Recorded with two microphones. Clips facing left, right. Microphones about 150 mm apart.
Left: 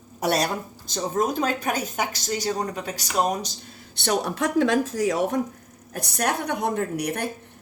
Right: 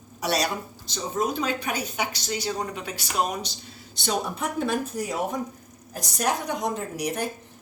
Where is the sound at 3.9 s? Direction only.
70° left (ahead or behind); by 5.4 s 90° left.